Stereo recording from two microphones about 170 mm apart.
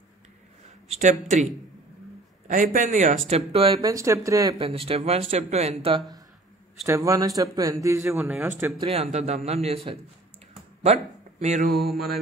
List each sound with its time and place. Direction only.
0.8 s speech: 40° right (ahead or behind)
2.4 s a man's voice: 50° right (ahead or behind)
3.3 s speech: 35° right (ahead or behind)
3.8 s speech: 20° right (ahead or behind)
4.6 s speech: 35° right (ahead or behind); by 8.7 s 15° right (ahead or behind)
8.8 s speech: 40° right (ahead or behind)
11.3 s speech: 40° right (ahead or behind)
11.9 s mantra: centre (ahead or behind)